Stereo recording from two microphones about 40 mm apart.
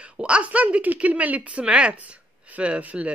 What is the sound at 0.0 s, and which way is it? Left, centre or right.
Speech, right.